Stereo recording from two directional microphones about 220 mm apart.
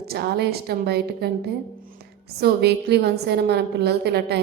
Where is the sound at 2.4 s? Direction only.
50° right (ahead or behind).